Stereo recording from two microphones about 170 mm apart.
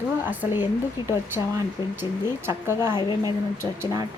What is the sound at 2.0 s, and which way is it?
Speech, 15° right (ahead or behind).